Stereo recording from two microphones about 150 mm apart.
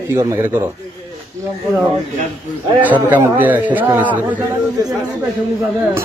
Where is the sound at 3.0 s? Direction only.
15° right (ahead or behind).